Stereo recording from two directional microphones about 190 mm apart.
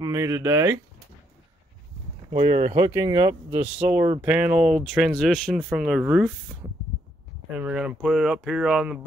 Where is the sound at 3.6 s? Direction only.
5° right (ahead or behind).